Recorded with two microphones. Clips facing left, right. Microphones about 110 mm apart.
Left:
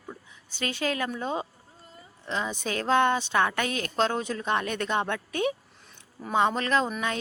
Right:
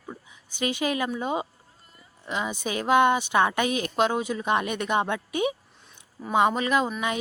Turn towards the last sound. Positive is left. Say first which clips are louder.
# right 2 dB
turn(degrees=-10)  # may be behind; listen again after turning